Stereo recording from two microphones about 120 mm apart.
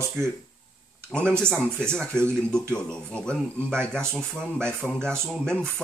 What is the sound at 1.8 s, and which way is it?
Speech, 5° left (ahead or behind).